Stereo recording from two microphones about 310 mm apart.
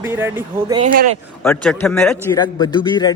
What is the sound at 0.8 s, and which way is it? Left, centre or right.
Speech, right.